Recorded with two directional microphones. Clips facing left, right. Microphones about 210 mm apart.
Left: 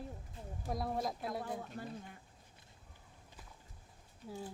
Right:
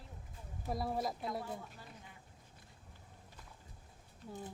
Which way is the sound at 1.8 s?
55° left (ahead or behind).